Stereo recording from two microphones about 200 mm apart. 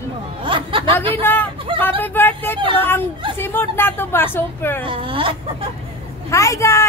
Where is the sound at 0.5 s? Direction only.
25° right (ahead or behind).